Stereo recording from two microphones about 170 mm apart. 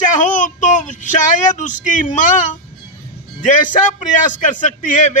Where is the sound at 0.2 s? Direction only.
50° left (ahead or behind).